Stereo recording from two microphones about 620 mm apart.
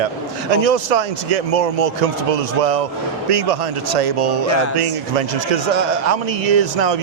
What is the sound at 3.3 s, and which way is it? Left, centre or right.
Speech, right.